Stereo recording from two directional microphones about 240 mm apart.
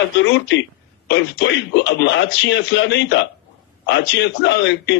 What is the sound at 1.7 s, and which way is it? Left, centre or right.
A man's voice, left.